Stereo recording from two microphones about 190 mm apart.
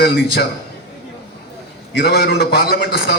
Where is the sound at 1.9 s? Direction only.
55° left (ahead or behind).